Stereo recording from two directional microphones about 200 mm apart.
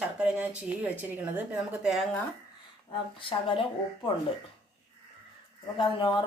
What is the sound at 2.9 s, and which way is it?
Speech, 25° left (ahead or behind).